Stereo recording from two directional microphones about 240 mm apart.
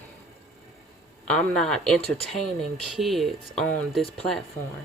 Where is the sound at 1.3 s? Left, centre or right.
Centre.